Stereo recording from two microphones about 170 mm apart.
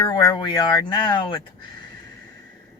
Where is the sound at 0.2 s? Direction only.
25° left (ahead or behind).